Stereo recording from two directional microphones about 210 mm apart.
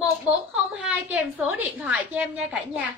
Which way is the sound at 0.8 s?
5° right (ahead or behind).